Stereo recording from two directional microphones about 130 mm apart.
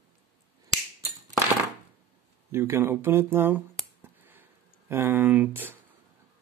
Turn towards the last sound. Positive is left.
turn(degrees=-15)  # may be behind; listen again after turning